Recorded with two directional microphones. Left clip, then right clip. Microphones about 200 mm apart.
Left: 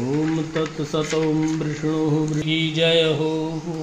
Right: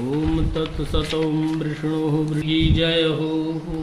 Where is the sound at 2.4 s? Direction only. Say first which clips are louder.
Left 1 dB; 35° left (ahead or behind).